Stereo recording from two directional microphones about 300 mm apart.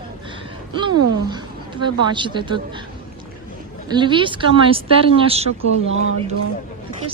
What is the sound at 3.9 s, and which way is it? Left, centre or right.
Speech, centre.